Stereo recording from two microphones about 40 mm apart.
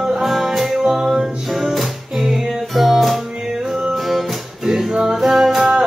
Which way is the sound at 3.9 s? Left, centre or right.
Centre.